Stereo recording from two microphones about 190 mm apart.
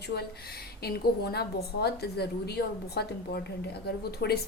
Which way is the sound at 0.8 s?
55° left (ahead or behind).